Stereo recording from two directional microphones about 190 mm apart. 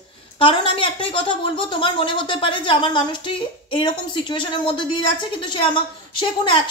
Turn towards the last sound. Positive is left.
turn(degrees=25)  # may be behind; listen again after turning